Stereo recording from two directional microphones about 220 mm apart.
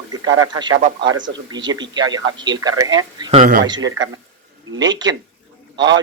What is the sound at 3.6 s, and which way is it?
Speech, 20° right (ahead or behind).